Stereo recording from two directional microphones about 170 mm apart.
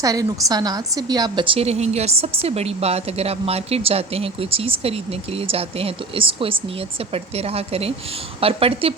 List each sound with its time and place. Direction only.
0.0 s a woman's voice: 20° right (ahead or behind)